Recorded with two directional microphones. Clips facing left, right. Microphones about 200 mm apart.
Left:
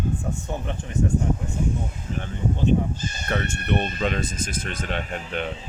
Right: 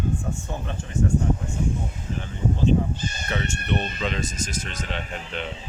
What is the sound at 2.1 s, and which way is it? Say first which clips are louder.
Speech: even; 55° left (ahead or behind).